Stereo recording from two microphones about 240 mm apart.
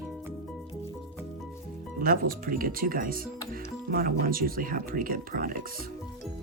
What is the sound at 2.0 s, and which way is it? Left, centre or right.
Speech, right.